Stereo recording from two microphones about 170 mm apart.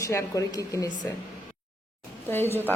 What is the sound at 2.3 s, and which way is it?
Speech, 10° left (ahead or behind).